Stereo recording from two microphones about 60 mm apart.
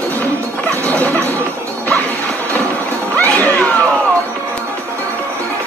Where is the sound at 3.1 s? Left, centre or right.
Left.